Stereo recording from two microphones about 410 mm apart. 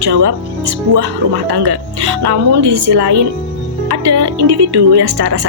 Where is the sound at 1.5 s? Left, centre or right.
Right.